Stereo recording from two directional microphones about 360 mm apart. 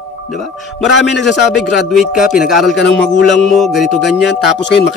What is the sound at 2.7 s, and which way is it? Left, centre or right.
Speech, left.